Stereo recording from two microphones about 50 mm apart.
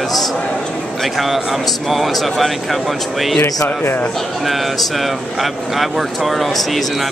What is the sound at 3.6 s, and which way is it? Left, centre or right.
Speech, left.